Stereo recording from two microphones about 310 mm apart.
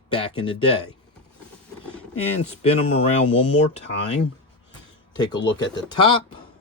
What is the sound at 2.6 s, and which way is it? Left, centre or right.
Speech, centre.